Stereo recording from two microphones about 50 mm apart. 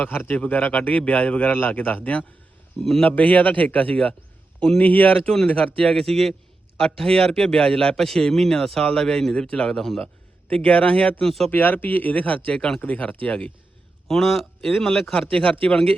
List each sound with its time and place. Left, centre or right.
0.0 s a man's voice: left
6.0 s a man's voice: centre
10.5 s speech: left
11.2 s a man's voice: centre
11.5 s a man's voice: left
12.5 s a man's voice: centre
12.8 s speech: left
14.1 s a man's voice: centre
15.4 s speech: left